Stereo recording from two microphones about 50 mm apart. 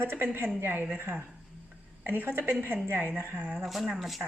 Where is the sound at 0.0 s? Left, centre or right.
Right.